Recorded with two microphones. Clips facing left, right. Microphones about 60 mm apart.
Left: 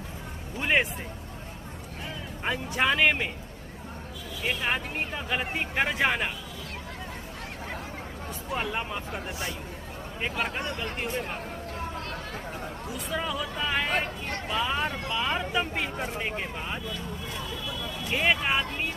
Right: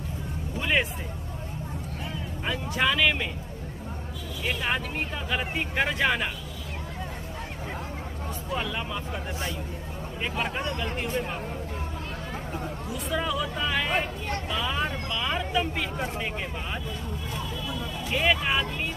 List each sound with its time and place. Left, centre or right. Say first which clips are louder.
0.6 s speech: left 1 dB; left
2.4 s speech: even; left
4.5 s speech: even; centre
8.6 s speech: even; left
10.4 s speech: right 2 dB; centre
13.1 s speech: right 3 dB; centre
15.0 s a sound: left 1 dB; centre
16.2 s speech: even; centre
18.1 s speech: right 1 dB; centre